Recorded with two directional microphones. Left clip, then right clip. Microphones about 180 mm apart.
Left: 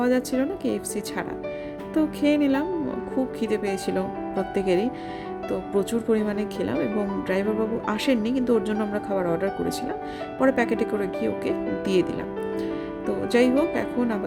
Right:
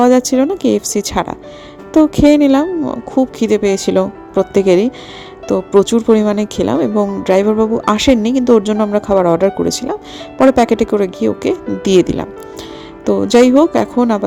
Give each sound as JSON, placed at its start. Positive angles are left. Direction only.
{"t": 0.0, "sound": "speech", "side_deg": -35}